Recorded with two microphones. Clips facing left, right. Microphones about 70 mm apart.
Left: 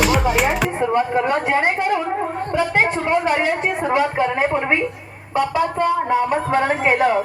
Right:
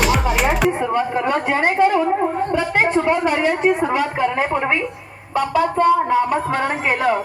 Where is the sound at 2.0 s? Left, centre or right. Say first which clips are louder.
Right 4 dB; centre.